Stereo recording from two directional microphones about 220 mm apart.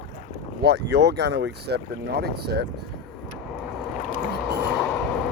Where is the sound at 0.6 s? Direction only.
45° right (ahead or behind).